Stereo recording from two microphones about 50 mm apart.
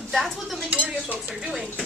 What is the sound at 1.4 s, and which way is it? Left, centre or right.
Speech, centre.